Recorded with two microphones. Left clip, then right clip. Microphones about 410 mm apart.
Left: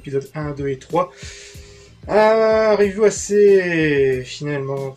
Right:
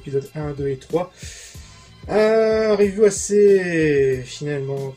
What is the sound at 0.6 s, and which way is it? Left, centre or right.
Speech, left.